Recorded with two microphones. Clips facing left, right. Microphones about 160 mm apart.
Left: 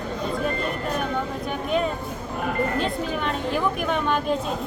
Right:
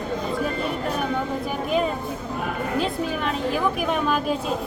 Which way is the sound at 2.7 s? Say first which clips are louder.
Right 1 dB; 5° right (ahead or behind).